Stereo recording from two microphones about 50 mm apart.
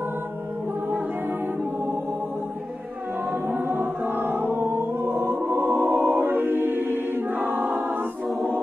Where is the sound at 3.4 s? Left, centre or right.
Right.